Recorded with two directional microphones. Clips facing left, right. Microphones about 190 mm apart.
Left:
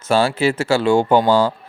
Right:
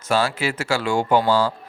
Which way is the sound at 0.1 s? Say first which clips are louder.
Left 5 dB; 30° left (ahead or behind).